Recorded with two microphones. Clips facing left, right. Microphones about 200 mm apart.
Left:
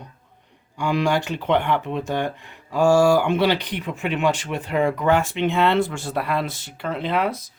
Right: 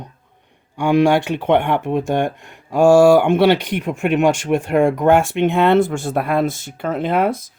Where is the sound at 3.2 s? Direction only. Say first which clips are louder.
Right 6 dB; 55° right (ahead or behind).